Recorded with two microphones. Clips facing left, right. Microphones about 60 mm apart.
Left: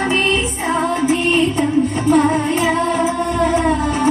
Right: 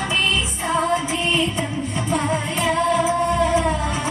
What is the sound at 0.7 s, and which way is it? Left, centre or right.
Music, left.